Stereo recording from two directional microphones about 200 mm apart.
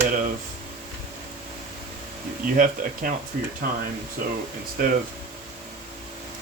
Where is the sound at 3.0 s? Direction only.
45° right (ahead or behind).